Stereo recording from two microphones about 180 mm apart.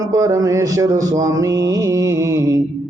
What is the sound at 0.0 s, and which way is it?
Mantra, 20° right (ahead or behind).